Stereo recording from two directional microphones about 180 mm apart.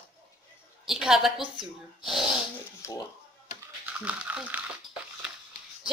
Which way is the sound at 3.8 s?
5° right (ahead or behind).